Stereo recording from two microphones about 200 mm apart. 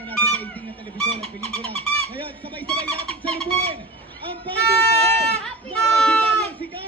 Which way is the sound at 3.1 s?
25° right (ahead or behind).